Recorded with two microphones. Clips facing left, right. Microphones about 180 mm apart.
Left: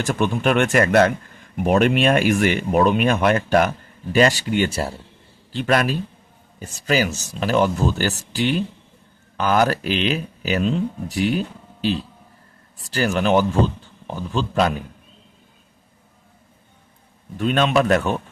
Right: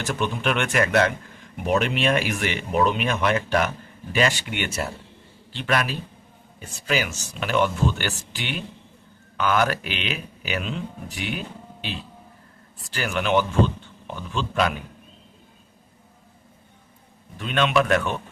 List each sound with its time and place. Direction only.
0.2 s speech: 45° left (ahead or behind)
17.3 s speech: 40° left (ahead or behind)